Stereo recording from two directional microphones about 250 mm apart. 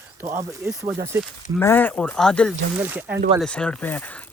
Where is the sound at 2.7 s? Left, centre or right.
Centre.